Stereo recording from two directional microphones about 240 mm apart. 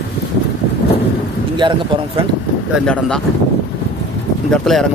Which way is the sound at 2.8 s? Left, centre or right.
Centre.